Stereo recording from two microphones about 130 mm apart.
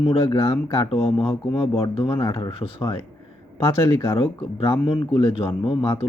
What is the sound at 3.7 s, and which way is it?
Speech, 20° left (ahead or behind).